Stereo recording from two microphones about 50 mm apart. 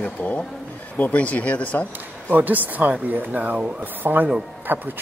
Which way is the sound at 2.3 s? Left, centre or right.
Right.